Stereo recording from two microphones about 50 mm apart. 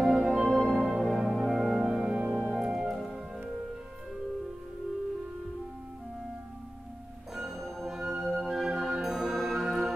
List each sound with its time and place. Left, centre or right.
0.0 s music: centre
2.1 s music: right
2.5 s music: centre
7.3 s music: centre